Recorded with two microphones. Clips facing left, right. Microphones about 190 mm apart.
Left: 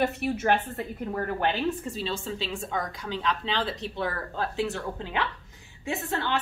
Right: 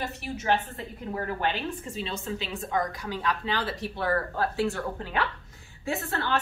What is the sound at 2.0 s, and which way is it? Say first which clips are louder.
A woman's voice: left 1 dB; 30° left (ahead or behind).